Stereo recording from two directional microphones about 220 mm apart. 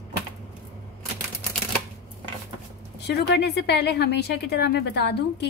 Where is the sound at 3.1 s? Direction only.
50° left (ahead or behind).